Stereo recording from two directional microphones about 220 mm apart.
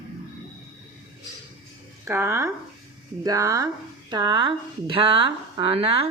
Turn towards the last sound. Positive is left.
turn(degrees=-25)  # may be behind; listen again after turning